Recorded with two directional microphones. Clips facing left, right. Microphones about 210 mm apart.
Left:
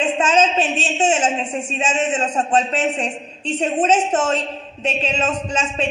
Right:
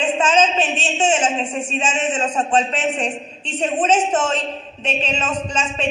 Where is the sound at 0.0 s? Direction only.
35° left (ahead or behind).